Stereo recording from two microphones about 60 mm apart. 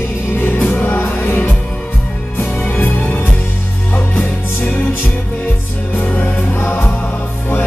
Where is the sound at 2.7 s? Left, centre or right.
Left.